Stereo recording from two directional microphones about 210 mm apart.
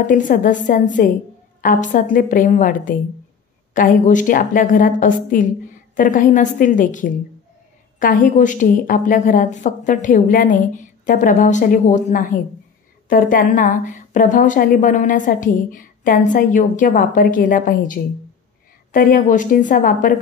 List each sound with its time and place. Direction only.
0.0 s a woman's voice: 40° left (ahead or behind)